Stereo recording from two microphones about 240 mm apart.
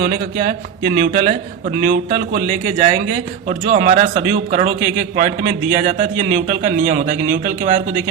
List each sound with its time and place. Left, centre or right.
0.0 s a man's voice: right